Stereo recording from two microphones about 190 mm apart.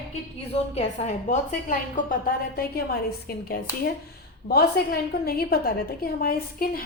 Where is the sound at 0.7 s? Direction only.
35° left (ahead or behind).